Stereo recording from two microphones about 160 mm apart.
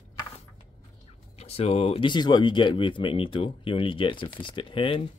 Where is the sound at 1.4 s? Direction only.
40° left (ahead or behind).